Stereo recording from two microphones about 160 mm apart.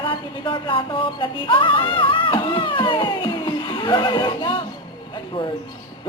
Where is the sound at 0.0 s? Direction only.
30° left (ahead or behind).